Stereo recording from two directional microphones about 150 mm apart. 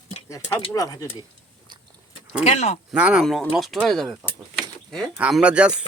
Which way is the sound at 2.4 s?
50° left (ahead or behind).